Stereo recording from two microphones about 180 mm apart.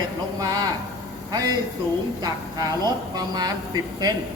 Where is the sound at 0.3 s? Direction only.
20° right (ahead or behind).